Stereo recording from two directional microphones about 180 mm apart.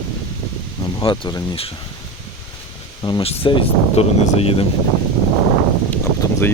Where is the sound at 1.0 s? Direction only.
25° left (ahead or behind).